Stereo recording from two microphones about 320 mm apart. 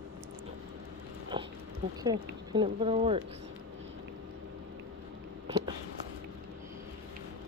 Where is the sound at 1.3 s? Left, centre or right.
Centre.